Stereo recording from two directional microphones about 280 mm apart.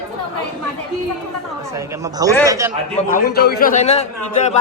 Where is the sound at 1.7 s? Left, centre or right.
Centre.